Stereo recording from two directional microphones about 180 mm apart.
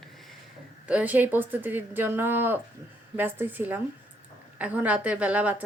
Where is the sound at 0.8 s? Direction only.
10° right (ahead or behind).